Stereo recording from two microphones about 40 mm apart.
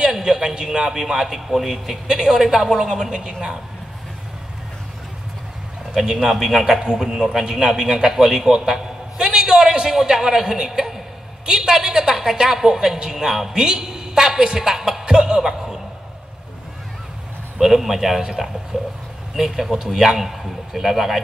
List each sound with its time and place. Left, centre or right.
0.1 s a woman's voice: centre
5.9 s a woman's voice: centre
17.6 s a woman's voice: centre